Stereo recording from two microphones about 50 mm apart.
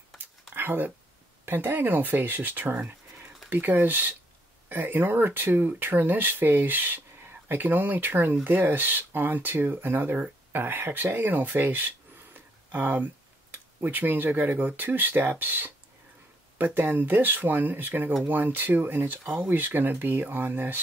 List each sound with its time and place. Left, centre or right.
0.6 s speech: right
12.4 s a sound: right
13.7 s speech: right